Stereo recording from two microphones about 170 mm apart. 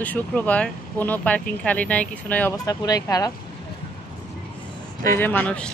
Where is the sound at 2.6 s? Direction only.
20° left (ahead or behind).